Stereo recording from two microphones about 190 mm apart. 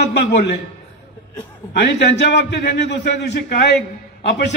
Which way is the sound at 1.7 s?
65° left (ahead or behind).